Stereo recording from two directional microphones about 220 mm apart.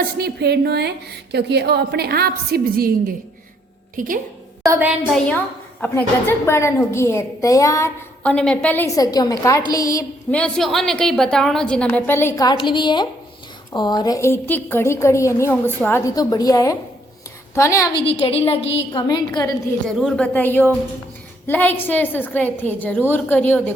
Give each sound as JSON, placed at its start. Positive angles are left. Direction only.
{"t": 0.0, "sound": "a woman's voice", "side_deg": -45}
{"t": 3.9, "sound": "a woman's voice", "side_deg": -40}
{"t": 4.6, "sound": "a sound", "side_deg": -10}
{"t": 5.8, "sound": "a woman's voice", "side_deg": 10}
{"t": 18.0, "sound": "a woman's voice", "side_deg": 25}
{"t": 19.9, "sound": "a woman's voice", "side_deg": 0}